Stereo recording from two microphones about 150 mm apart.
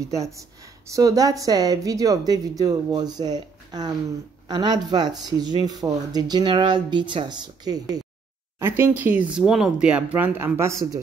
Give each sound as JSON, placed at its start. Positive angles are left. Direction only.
{"t": 0.8, "sound": "speech", "side_deg": -20}
{"t": 8.5, "sound": "speech", "side_deg": -15}